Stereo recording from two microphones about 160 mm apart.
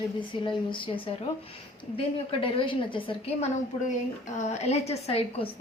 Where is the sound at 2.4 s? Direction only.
30° left (ahead or behind).